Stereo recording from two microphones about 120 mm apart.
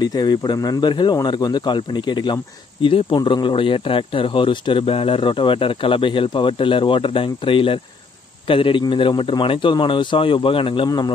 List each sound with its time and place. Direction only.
0.0 s speech: 35° left (ahead or behind)